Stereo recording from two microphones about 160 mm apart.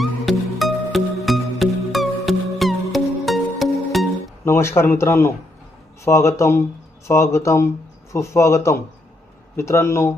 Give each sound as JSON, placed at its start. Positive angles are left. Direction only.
{"t": 0.0, "sound": "music", "side_deg": 0}
{"t": 4.4, "sound": "a man's voice", "side_deg": 15}